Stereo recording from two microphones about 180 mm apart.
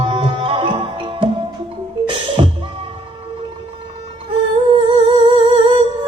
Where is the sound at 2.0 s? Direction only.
30° right (ahead or behind).